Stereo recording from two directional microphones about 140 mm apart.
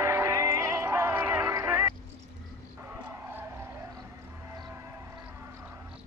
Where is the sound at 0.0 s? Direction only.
20° right (ahead or behind).